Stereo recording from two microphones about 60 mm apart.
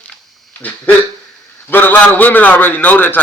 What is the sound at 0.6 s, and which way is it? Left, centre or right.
A man's voice, left.